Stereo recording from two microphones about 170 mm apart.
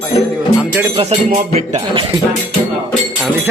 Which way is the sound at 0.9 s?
35° right (ahead or behind).